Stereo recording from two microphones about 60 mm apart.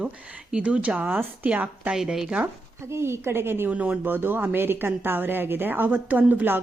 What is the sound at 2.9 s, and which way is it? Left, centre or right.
Speech, right.